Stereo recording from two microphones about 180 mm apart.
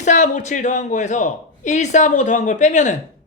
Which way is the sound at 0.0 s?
40° left (ahead or behind).